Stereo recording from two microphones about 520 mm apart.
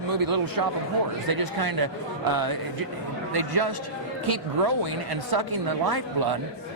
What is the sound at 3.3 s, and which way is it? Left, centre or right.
A man's voice, right.